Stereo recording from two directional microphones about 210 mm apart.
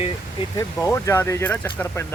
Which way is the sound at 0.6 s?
10° left (ahead or behind).